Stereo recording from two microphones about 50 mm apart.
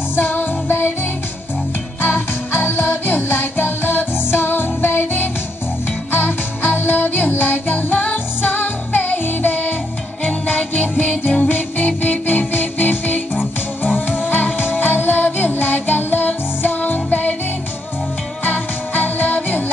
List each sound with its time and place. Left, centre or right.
0.1 s music: left
2.0 s music: left
18.4 s music: left